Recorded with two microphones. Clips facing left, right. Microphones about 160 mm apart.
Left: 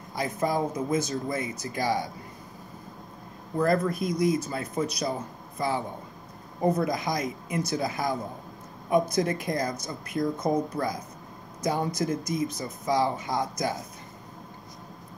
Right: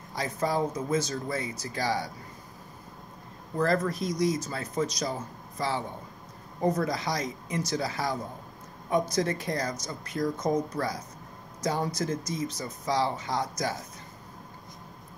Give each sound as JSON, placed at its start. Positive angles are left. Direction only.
{"t": 0.1, "sound": "speech", "side_deg": 15}
{"t": 1.4, "sound": "speech", "side_deg": -35}
{"t": 1.7, "sound": "speech", "side_deg": 15}
{"t": 3.5, "sound": "speech", "side_deg": 15}
{"t": 4.1, "sound": "speech", "side_deg": -35}
{"t": 4.5, "sound": "speech", "side_deg": 15}